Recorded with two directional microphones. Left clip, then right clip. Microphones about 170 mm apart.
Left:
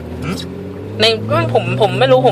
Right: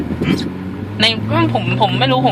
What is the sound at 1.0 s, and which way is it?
Speech, 25° left (ahead or behind).